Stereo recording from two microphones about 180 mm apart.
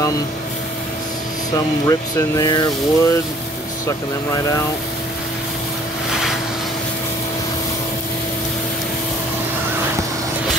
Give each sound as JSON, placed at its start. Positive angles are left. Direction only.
{"t": 1.5, "sound": "speech", "side_deg": 20}